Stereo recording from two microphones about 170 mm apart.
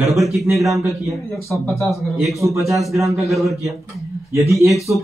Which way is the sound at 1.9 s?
Centre (ahead or behind).